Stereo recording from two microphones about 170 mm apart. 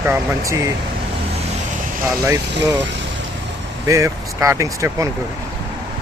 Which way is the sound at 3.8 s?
20° right (ahead or behind).